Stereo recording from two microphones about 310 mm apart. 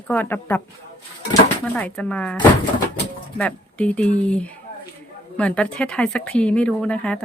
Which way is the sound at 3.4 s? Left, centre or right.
Centre.